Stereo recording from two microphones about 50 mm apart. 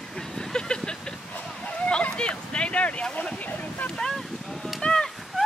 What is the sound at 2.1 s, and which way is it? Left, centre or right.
Vehicle, centre.